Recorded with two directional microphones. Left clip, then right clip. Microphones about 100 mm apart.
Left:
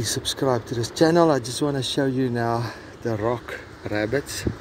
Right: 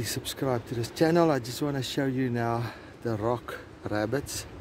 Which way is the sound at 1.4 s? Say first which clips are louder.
Left 7 dB; 10° right (ahead or behind).